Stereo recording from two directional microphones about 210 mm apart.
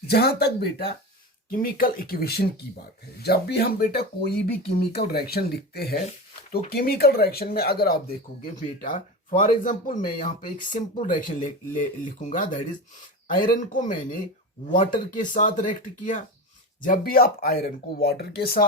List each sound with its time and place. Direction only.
0.1 s speech: 50° left (ahead or behind)